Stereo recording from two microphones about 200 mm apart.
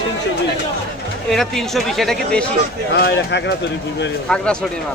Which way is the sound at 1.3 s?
Centre (ahead or behind).